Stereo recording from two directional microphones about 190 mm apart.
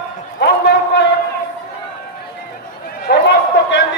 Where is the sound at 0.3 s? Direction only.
60° left (ahead or behind).